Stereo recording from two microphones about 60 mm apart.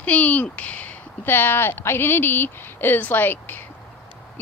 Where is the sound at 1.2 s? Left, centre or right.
Left.